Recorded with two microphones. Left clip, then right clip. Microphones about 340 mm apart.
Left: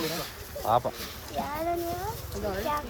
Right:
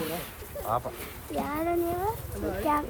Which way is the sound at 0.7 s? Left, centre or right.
Left.